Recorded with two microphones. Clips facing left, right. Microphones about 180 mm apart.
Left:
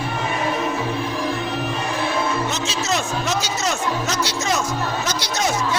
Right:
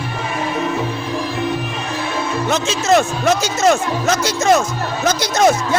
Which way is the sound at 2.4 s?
55° right (ahead or behind).